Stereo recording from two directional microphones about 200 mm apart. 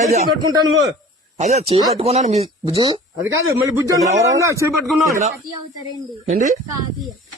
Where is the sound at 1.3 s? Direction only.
35° right (ahead or behind).